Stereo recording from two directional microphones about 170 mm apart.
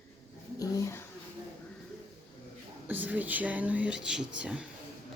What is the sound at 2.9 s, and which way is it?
Speech, 10° right (ahead or behind).